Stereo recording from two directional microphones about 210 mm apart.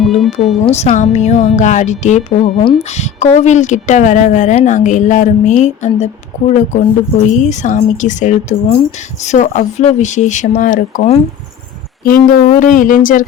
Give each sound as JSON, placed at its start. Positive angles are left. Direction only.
{"t": 0.0, "sound": "music", "side_deg": 0}
{"t": 0.6, "sound": "a woman's voice", "side_deg": 30}
{"t": 12.3, "sound": "a woman's voice", "side_deg": 40}